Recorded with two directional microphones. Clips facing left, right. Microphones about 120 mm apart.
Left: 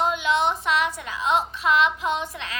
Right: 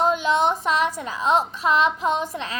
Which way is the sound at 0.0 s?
40° right (ahead or behind).